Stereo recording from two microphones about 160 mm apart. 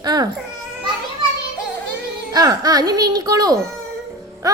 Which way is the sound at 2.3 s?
25° right (ahead or behind).